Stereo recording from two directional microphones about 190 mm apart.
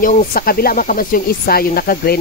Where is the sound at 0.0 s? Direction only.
50° left (ahead or behind).